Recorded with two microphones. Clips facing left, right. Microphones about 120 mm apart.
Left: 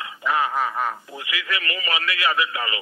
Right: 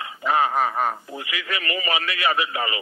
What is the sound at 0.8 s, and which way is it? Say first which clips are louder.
A man's voice: right 2 dB; 30° right (ahead or behind).